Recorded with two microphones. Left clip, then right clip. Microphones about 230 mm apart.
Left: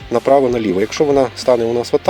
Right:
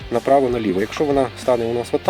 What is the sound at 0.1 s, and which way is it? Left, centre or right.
Speech, left.